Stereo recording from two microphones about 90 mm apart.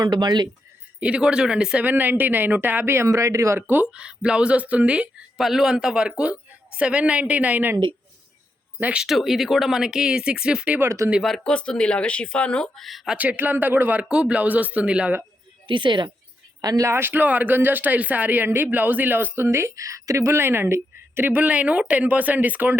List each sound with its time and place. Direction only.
0.0 s speech: 50° right (ahead or behind)
0.9 s speech: 10° right (ahead or behind); by 3.6 s 35° right (ahead or behind)
3.9 s speech: 10° right (ahead or behind)
8.8 s speech: 10° right (ahead or behind)
10.8 s speech: 35° right (ahead or behind)
11.2 s speech: 5° left (ahead or behind)
12.7 s speech: centre (ahead or behind)
13.1 s speech: 20° right (ahead or behind)
15.6 s a woman's voice: 65° right (ahead or behind)
16.6 s speech: 40° right (ahead or behind)
16.9 s speech: 25° right (ahead or behind)